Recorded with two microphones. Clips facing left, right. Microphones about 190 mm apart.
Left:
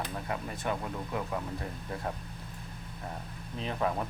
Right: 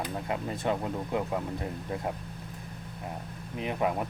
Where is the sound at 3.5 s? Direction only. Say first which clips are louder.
Right 2 dB; 15° right (ahead or behind).